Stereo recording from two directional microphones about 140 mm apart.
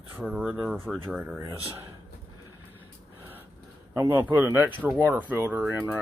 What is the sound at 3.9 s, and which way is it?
Speech, 15° right (ahead or behind).